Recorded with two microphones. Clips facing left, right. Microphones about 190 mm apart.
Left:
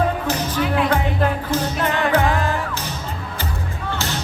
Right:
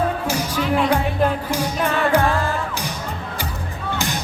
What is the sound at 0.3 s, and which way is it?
Music, 10° right (ahead or behind).